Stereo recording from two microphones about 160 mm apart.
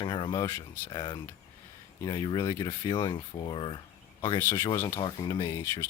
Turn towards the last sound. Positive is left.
turn(degrees=15)  # may be behind; listen again after turning